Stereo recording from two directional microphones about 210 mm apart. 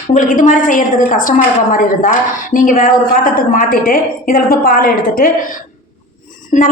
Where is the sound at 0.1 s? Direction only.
35° left (ahead or behind).